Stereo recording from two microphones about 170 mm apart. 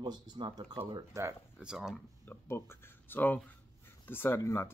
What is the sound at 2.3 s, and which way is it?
Speech, 15° left (ahead or behind).